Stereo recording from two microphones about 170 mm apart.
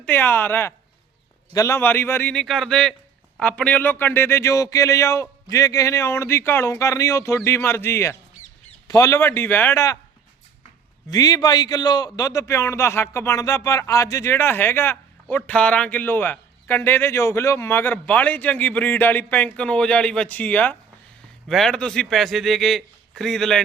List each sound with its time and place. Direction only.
0.0 s a man's voice: 10° left (ahead or behind)
11.1 s a man's voice: 20° left (ahead or behind); by 23.6 s centre (ahead or behind)